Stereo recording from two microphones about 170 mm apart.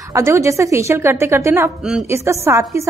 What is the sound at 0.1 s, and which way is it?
A woman's voice, 15° right (ahead or behind).